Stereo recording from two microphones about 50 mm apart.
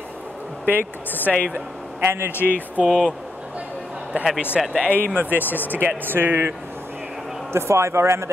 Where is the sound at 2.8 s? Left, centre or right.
Centre.